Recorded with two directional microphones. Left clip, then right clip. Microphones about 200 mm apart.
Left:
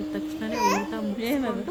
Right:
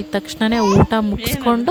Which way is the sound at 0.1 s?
45° right (ahead or behind).